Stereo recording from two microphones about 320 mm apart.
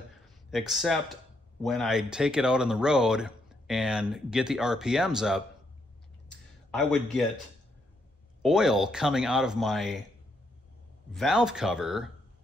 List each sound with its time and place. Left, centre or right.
0.5 s speech: centre
6.2 s a sound: centre
8.4 s speech: centre
11.1 s speech: centre